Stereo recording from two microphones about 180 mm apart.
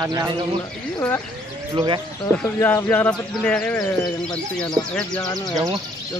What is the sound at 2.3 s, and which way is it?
A man's voice, 10° left (ahead or behind).